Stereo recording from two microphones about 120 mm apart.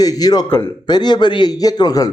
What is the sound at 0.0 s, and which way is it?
A man's voice, 30° left (ahead or behind).